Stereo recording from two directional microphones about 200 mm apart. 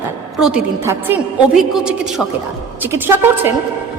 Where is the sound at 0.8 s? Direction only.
15° right (ahead or behind).